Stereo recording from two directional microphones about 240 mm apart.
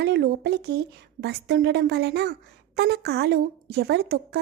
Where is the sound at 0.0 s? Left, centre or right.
Right.